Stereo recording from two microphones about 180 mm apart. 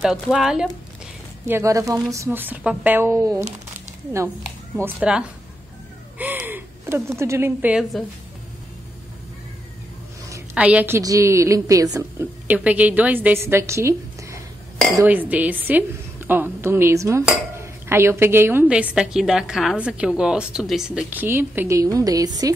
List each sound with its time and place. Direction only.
0.0 s speech: 5° right (ahead or behind)
1.5 s speech: 15° right (ahead or behind)
4.7 s a woman's voice: 10° right (ahead or behind)
10.5 s speech: 5° right (ahead or behind)
11.0 s speech: 20° right (ahead or behind)